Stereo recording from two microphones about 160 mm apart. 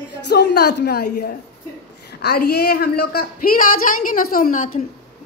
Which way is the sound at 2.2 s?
80° left.